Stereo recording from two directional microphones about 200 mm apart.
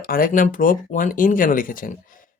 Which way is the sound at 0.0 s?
45° left (ahead or behind).